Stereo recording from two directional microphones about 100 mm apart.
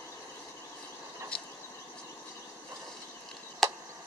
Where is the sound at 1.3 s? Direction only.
10° left (ahead or behind).